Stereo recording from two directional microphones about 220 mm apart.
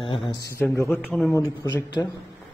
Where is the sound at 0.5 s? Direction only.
10° left (ahead or behind).